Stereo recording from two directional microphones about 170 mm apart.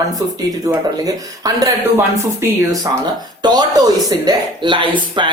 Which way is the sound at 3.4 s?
25° right (ahead or behind).